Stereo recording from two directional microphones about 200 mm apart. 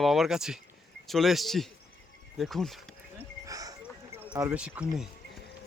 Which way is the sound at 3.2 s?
15° right (ahead or behind).